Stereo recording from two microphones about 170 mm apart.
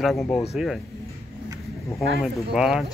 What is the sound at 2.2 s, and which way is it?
Speech, 5° right (ahead or behind).